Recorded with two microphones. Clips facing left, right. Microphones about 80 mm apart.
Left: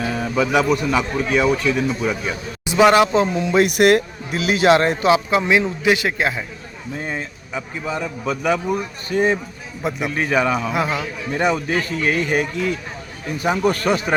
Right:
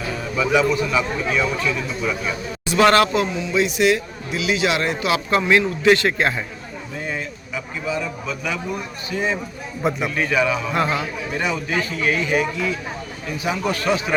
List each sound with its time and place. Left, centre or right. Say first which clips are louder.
0.2 s a man's voice: even; left
2.6 s a man's voice: left 2 dB; centre
3.3 s a man's voice: left 4 dB; left
5.1 s a man's voice: left 1 dB; centre
7.0 s a man's voice: even; left
9.8 s a man's voice: right 2 dB; centre
10.2 s a man's voice: left 4 dB; left
10.7 s a man's voice: even; centre
11.3 s a man's voice: left 4 dB; left